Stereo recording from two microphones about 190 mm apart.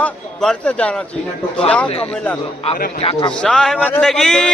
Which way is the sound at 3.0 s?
30° left (ahead or behind).